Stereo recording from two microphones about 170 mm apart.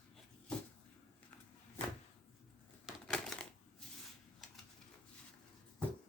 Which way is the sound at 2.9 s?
Centre (ahead or behind).